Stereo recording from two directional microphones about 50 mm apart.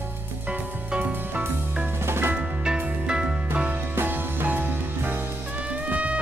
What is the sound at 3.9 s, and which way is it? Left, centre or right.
Music, right.